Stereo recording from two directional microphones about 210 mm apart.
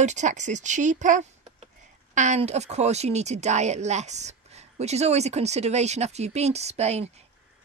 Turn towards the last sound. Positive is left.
turn(degrees=-30)  # may be behind; listen again after turning